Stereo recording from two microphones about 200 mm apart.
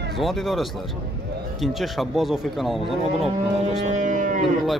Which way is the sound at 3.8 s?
40° right (ahead or behind).